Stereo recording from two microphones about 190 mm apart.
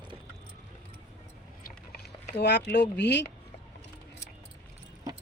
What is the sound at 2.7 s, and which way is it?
Speech, 65° left (ahead or behind).